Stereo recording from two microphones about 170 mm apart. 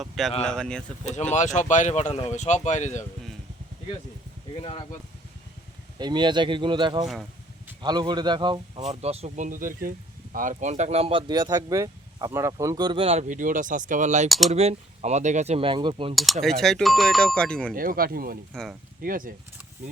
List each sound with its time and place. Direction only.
0.0 s speech: centre (ahead or behind)
1.0 s speech: 45° left (ahead or behind)
6.0 s speech: 25° right (ahead or behind)
7.0 s speech: centre (ahead or behind)
7.8 s speech: 25° right (ahead or behind)
8.8 s speech: 40° right (ahead or behind)
14.3 s speech: centre (ahead or behind)
14.5 s speech: 40° right (ahead or behind)
16.1 s speech: centre (ahead or behind)
17.7 s speech: 60° right (ahead or behind)